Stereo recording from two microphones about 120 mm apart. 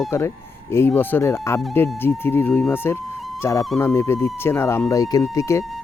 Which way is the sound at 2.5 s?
5° left (ahead or behind).